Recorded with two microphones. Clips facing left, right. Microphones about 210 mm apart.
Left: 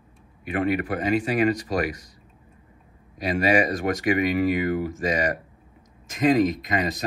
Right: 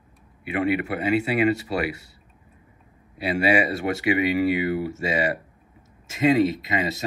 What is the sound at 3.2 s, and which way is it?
Speech, 45° left (ahead or behind).